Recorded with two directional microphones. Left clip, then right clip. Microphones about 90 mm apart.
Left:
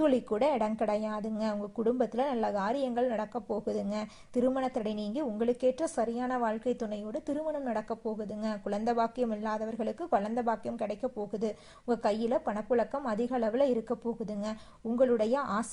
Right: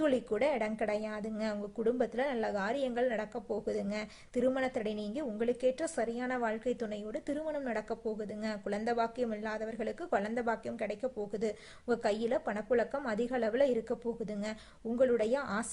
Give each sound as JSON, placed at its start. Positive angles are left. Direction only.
{"t": 0.0, "sound": "a woman's voice", "side_deg": 35}
{"t": 4.4, "sound": "a woman's voice", "side_deg": 25}
{"t": 14.9, "sound": "a woman's voice", "side_deg": 35}